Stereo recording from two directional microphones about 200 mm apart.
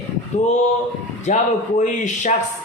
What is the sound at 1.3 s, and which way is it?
Speech, 35° left (ahead or behind).